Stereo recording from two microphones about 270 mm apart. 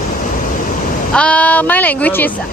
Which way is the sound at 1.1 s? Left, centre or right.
Centre.